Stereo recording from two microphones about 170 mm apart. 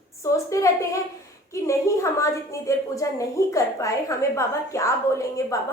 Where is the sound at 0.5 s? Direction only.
20° left (ahead or behind).